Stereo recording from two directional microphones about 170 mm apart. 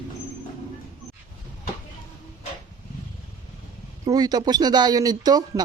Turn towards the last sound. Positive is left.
turn(degrees=-25)  # may be behind; listen again after turning